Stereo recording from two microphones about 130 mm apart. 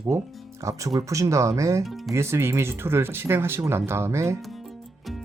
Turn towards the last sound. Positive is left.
turn(degrees=-20)  # may be behind; listen again after turning